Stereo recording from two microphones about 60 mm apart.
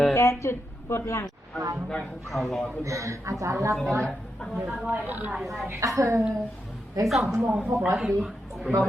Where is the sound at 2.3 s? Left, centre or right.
Centre.